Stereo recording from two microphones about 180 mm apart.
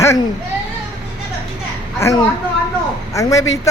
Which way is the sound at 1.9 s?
15° left (ahead or behind).